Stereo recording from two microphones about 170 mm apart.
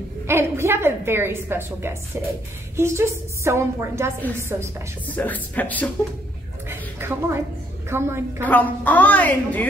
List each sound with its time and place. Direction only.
0.3 s a woman's voice: 15° right (ahead or behind)
4.2 s a woman's voice: 10° left (ahead or behind)
6.7 s a sound: 15° right (ahead or behind)
7.9 s a woman's voice: 15° right (ahead or behind)
8.5 s a woman's voice: 10° left (ahead or behind)